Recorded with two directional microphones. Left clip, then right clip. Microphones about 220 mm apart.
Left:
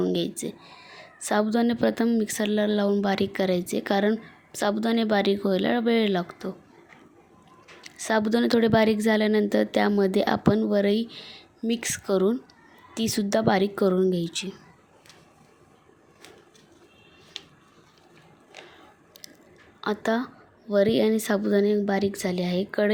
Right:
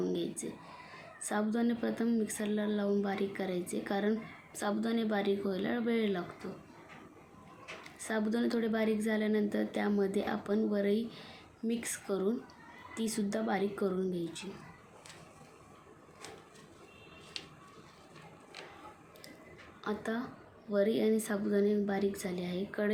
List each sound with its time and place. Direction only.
0.0 s a sound: 40° left (ahead or behind)
1.2 s speech: 40° left (ahead or behind)
7.9 s speech: 45° left (ahead or behind)
19.8 s a woman's voice: 45° left (ahead or behind)